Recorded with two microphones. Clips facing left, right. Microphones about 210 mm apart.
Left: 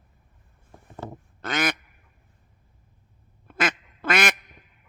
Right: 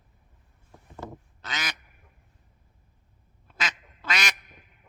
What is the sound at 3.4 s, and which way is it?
Quack, 55° left (ahead or behind).